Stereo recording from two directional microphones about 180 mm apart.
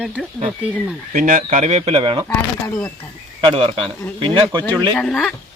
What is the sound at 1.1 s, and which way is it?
Speech, 45° right (ahead or behind).